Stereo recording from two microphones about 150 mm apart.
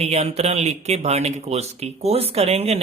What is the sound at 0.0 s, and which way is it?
Speech, 45° right (ahead or behind).